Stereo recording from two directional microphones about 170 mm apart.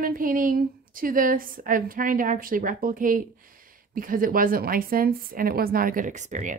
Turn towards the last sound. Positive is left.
turn(degrees=-45)  # may be behind; listen again after turning